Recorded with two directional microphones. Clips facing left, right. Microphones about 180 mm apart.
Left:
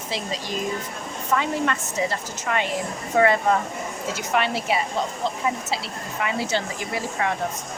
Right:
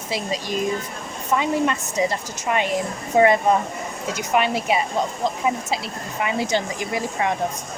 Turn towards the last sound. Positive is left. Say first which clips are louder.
# right 2 dB
turn(degrees=-15)  # may be behind; listen again after turning